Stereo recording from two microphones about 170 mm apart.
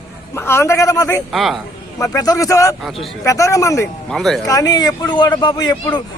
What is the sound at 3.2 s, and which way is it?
Speech, 20° left (ahead or behind).